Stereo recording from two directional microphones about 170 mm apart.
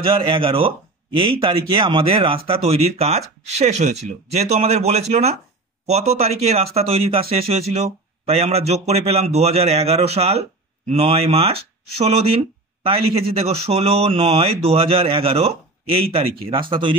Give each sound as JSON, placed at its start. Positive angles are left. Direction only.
{"t": 0.0, "sound": "speech", "side_deg": -30}